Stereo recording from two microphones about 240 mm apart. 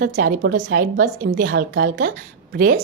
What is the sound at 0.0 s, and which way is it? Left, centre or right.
A woman's voice, right.